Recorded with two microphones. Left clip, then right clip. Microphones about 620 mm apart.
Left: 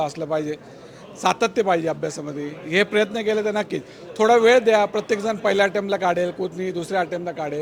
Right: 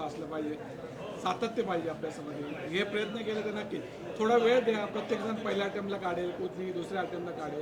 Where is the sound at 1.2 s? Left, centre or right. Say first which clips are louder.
Left 13 dB; left.